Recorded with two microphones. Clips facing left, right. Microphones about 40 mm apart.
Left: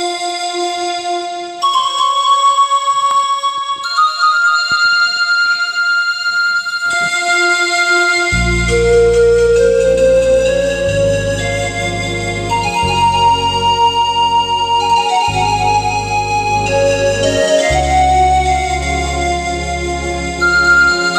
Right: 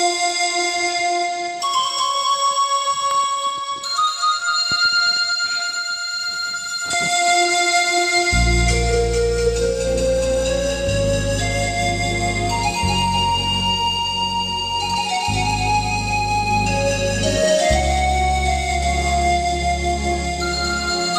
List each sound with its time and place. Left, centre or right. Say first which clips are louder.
1.6 s music: left 9 dB; left
7.2 s music: left 4 dB; left
12.9 s music: left 10 dB; left
20.4 s music: left 19 dB; left